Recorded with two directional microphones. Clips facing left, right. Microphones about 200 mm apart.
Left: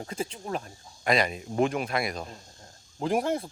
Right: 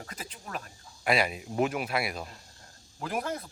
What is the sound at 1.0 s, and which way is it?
Speech, 5° right (ahead or behind).